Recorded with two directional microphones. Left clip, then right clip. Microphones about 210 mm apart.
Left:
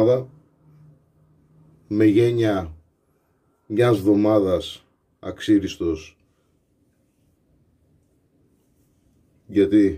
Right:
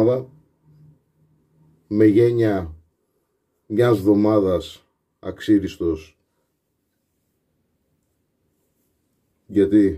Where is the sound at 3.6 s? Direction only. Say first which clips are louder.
Right 1 dB; 25° left (ahead or behind).